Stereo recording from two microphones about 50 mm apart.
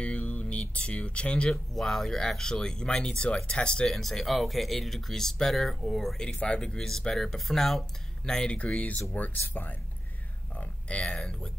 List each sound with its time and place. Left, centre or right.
0.0 s a sound: left
1.5 s speech: centre
3.9 s speech: centre
6.1 s speech: centre
8.5 s speech: left
9.5 s speech: left
10.5 s a sound: left
11.1 s speech: centre